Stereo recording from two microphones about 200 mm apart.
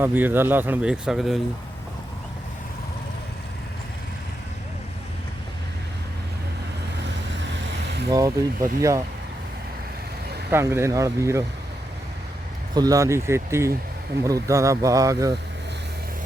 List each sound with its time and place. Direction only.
0.0 s speech: 10° right (ahead or behind)
7.1 s vehicle: 65° right (ahead or behind)
8.1 s speech: 15° right (ahead or behind)
10.5 s speech: 10° right (ahead or behind)
12.7 s speech: 20° right (ahead or behind)